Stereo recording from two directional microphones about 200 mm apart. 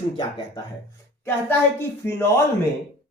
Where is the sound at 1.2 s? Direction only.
10° left (ahead or behind).